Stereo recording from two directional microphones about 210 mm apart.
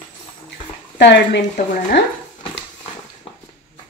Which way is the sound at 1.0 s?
55° left (ahead or behind).